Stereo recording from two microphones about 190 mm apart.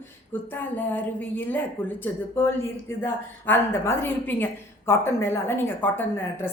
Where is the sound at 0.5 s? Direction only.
10° left (ahead or behind).